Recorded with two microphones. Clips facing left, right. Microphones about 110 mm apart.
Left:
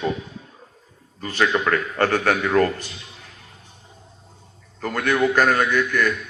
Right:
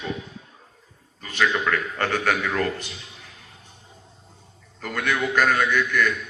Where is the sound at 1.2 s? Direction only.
40° left (ahead or behind).